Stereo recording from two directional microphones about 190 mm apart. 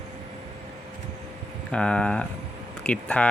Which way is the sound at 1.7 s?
5° left (ahead or behind).